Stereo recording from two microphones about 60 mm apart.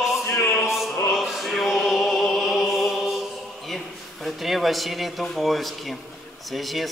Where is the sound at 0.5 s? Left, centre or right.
Centre.